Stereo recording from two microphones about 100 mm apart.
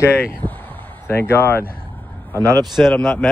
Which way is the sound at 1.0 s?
25° left (ahead or behind).